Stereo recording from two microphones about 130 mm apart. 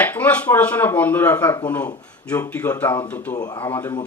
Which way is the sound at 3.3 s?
30° left (ahead or behind).